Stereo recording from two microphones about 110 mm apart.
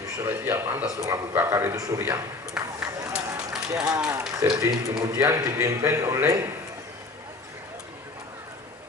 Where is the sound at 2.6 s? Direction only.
10° right (ahead or behind).